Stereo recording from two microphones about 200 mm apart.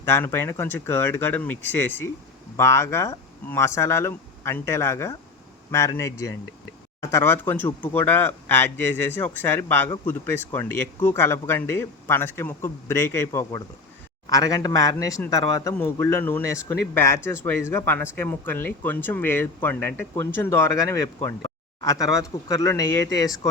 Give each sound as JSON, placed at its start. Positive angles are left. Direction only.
{"t": 0.0, "sound": "speech", "side_deg": 10}
{"t": 2.6, "sound": "speech", "side_deg": 15}
{"t": 21.2, "sound": "a sound", "side_deg": 20}
{"t": 22.2, "sound": "speech", "side_deg": 15}